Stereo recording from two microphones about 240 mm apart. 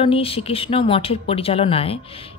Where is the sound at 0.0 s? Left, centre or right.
Left.